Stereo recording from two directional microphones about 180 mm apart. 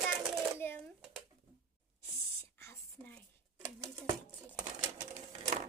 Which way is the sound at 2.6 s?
10° left (ahead or behind).